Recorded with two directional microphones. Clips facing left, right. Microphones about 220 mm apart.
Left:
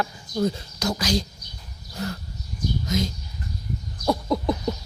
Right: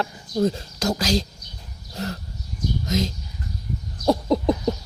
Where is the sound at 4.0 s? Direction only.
35° right (ahead or behind).